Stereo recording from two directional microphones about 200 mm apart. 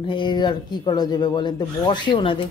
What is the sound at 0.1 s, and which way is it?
A woman's voice, 20° left (ahead or behind).